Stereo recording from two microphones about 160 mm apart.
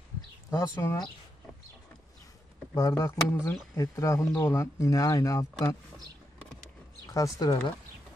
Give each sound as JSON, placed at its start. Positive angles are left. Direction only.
{"t": 0.6, "sound": "speech", "side_deg": 25}
{"t": 2.7, "sound": "speech", "side_deg": 20}
{"t": 7.2, "sound": "speech", "side_deg": 20}